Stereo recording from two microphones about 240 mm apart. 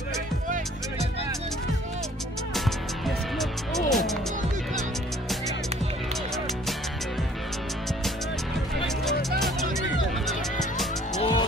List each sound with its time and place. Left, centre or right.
3.3 s music: centre
10.2 s music: centre
11.1 s music: left